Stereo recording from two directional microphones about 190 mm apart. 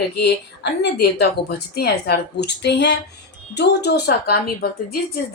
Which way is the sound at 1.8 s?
60° left (ahead or behind).